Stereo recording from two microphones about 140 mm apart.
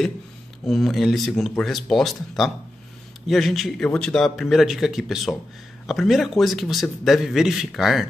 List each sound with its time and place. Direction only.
0.7 s a man's voice: centre (ahead or behind)